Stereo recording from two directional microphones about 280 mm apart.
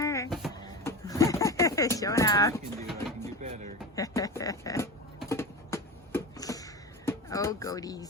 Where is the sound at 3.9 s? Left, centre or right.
Centre.